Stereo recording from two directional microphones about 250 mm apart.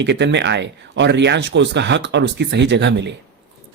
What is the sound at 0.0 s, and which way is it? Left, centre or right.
Speech, right.